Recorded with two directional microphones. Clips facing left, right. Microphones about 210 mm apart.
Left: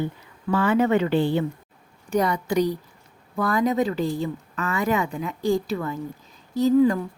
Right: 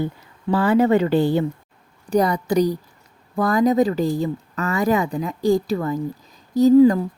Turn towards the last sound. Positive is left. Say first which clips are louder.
# right 6 dB
turn(degrees=-35)  # may be behind; listen again after turning